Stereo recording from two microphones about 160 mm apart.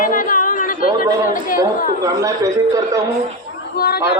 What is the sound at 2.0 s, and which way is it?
Speech, 20° right (ahead or behind).